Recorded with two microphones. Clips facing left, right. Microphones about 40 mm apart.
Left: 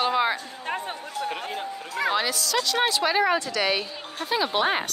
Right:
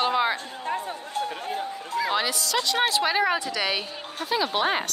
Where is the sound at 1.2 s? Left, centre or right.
Left.